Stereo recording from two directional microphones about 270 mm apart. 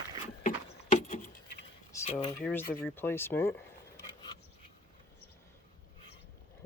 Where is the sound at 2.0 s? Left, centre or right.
Left.